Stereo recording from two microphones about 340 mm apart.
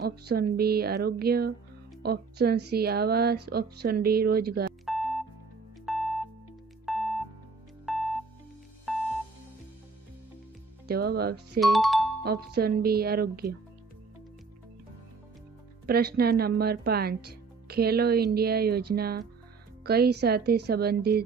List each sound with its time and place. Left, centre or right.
0.0 s speech: right
4.9 s music: centre
10.8 s speech: right
11.6 s speech: centre
12.2 s speech: right
15.9 s speech: right